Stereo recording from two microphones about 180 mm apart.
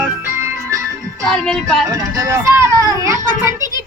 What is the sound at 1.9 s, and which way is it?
Speech, 20° right (ahead or behind).